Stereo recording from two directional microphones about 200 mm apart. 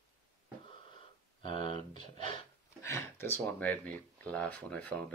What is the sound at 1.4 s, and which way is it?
Speech, 25° left (ahead or behind).